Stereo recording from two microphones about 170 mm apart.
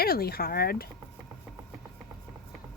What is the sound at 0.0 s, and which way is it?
Speech, 65° left (ahead or behind).